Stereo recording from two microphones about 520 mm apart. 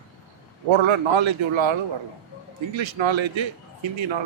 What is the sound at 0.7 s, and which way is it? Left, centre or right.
A man's voice, right.